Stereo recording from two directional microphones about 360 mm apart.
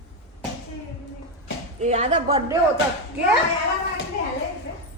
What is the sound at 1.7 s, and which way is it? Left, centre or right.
Speech, centre.